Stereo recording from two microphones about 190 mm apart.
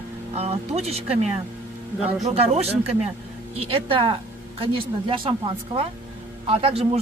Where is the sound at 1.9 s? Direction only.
5° right (ahead or behind).